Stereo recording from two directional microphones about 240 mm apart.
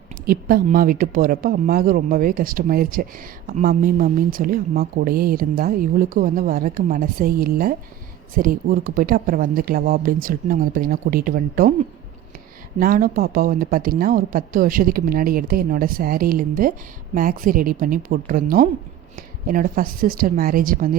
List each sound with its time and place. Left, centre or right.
0.3 s speech: right
12.8 s speech: right